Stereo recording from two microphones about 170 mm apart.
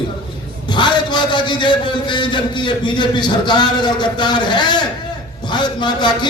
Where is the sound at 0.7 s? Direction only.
25° left (ahead or behind).